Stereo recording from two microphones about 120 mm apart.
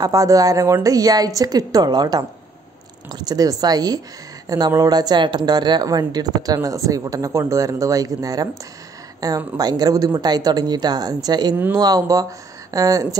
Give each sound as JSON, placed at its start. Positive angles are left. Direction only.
{"t": 0.0, "sound": "a woman's voice", "side_deg": -30}